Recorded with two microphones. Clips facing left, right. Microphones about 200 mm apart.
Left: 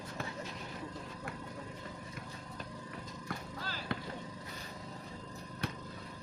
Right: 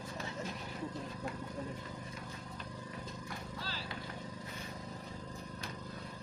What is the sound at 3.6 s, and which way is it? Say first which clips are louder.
Vehicle: left 4 dB; 50° left (ahead or behind).